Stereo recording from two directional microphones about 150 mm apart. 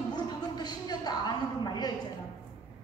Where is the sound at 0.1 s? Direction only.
25° left (ahead or behind).